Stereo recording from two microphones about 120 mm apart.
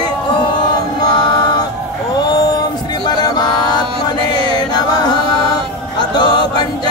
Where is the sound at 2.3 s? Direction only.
30° left (ahead or behind).